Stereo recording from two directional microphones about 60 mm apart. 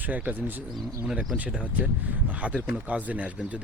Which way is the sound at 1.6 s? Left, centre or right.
Right.